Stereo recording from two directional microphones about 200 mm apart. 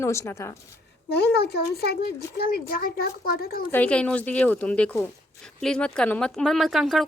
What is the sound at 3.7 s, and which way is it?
Speech, 5° left (ahead or behind).